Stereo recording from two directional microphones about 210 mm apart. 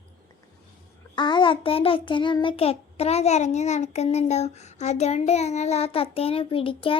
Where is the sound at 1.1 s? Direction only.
20° left (ahead or behind).